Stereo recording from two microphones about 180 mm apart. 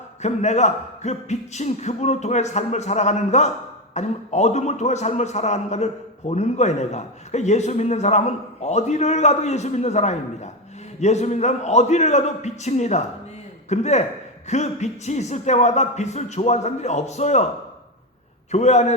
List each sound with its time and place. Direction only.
0.2 s a man's voice: 40° left (ahead or behind)
18.5 s a man's voice: 40° left (ahead or behind)